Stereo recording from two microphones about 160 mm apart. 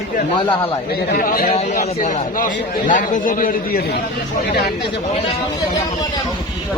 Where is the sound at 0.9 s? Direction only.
65° left (ahead or behind).